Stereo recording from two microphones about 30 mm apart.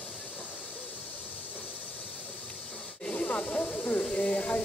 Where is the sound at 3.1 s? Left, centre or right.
Left.